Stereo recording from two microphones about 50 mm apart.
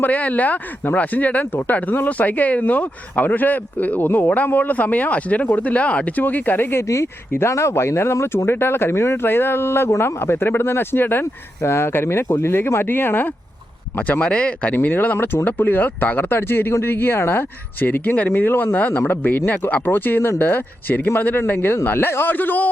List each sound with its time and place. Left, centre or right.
0.0 s speech: left
6.8 s speech: left
11.6 s speech: left
14.2 s speech: left
14.7 s speech: left